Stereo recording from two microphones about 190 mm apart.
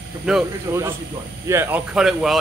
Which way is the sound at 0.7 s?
15° right (ahead or behind).